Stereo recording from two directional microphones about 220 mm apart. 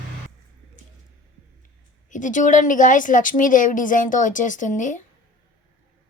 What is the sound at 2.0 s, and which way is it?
A woman's voice, 35° left (ahead or behind).